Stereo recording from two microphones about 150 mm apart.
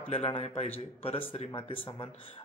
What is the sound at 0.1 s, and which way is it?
A man's voice, 40° left (ahead or behind).